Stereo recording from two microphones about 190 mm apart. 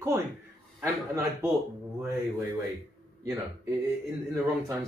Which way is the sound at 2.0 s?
10° right (ahead or behind).